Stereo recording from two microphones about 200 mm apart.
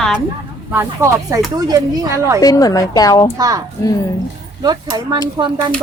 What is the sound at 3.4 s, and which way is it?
Speech, 20° right (ahead or behind).